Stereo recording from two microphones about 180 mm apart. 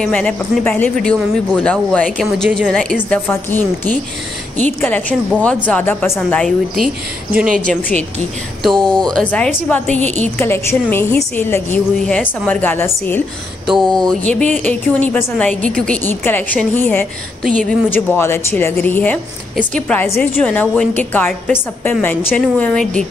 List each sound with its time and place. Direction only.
0.0 s speech: 5° left (ahead or behind)
5.4 s a woman's voice: 5° left (ahead or behind)
6.4 s speech: centre (ahead or behind)
7.3 s a woman's voice: 50° right (ahead or behind)
8.6 s a woman's voice: 5° left (ahead or behind)
13.7 s a woman's voice: centre (ahead or behind)